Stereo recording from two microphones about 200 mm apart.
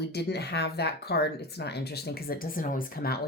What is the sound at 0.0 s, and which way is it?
Speech, 55° left (ahead or behind).